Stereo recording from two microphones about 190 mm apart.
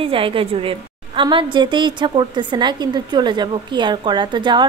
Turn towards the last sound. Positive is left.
turn(degrees=-25)  # may be behind; listen again after turning